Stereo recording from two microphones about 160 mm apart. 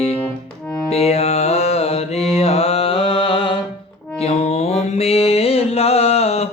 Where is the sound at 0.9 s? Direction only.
40° left (ahead or behind).